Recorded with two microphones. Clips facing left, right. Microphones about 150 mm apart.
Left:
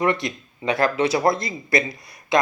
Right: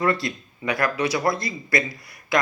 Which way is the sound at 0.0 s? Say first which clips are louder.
Left 1 dB; 20° left (ahead or behind).